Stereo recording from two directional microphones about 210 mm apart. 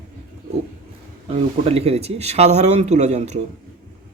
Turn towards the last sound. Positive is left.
turn(degrees=-35)  # may be behind; listen again after turning